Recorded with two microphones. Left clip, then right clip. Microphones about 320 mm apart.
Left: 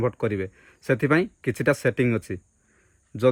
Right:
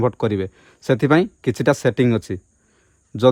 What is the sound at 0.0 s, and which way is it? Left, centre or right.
Speech, right.